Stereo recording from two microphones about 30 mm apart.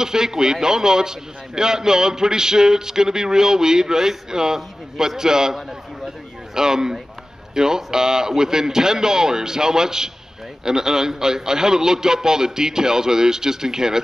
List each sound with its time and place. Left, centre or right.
0.0 s a man's voice: centre